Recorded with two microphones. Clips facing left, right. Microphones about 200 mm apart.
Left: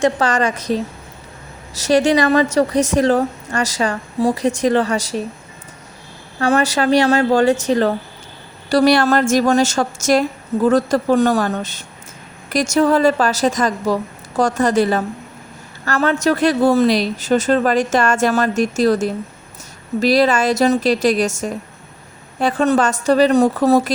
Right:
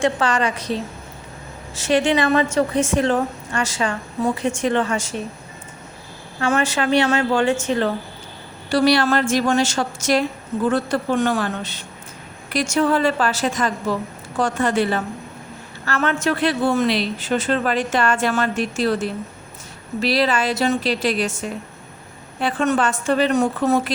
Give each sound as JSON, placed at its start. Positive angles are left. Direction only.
{"t": 0.0, "sound": "a woman's voice", "side_deg": 40}
{"t": 6.4, "sound": "a woman's voice", "side_deg": 40}